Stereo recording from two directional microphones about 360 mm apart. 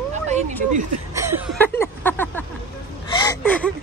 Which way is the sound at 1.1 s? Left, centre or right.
Centre.